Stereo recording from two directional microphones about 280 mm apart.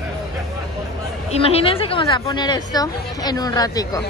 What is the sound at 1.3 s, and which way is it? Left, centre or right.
A woman's voice, left.